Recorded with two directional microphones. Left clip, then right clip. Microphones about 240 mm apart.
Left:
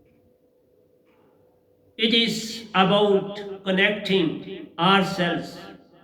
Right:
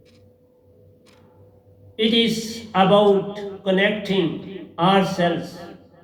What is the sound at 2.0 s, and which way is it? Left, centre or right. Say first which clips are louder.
A man's voice: right 1 dB; left.